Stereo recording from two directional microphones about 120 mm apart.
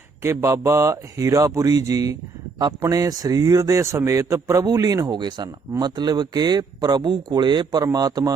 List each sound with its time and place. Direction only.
0.2 s a man's voice: 25° right (ahead or behind)